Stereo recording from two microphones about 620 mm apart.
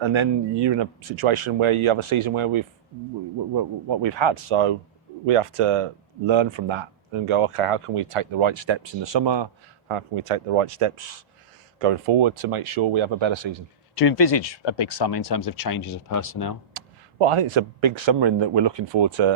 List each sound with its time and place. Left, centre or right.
0.0 s speech: right
3.5 s speech: right
9.9 s speech: right
14.1 s speech: left
17.2 s speech: right